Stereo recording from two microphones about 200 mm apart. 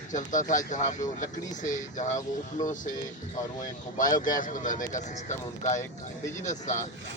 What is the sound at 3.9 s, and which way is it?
Speech, 40° left (ahead or behind).